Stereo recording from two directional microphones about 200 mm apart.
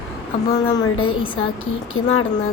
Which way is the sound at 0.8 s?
90° left.